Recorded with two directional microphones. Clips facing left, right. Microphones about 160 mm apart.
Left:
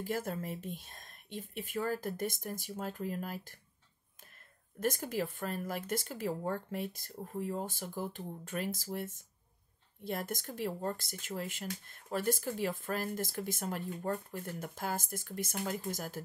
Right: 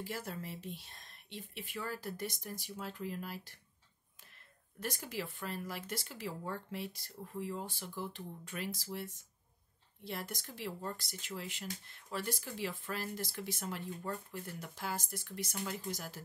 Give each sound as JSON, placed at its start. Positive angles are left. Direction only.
{"t": 0.0, "sound": "speech", "side_deg": 50}
{"t": 4.7, "sound": "speech", "side_deg": 45}